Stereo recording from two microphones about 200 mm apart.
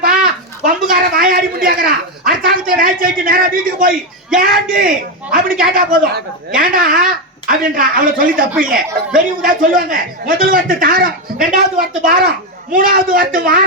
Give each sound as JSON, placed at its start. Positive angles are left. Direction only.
{"t": 0.9, "sound": "speech", "side_deg": -45}